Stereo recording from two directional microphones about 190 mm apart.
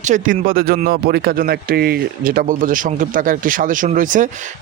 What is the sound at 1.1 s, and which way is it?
Speech, 55° right (ahead or behind).